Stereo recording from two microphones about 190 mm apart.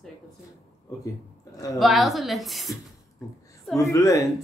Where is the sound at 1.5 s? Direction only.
20° left (ahead or behind).